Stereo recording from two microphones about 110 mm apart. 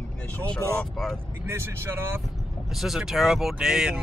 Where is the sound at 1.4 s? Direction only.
20° right (ahead or behind).